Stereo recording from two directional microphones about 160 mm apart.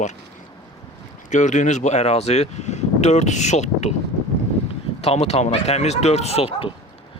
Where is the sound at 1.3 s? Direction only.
50° left (ahead or behind).